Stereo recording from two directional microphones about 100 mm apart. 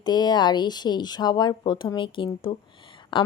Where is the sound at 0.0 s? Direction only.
45° left (ahead or behind).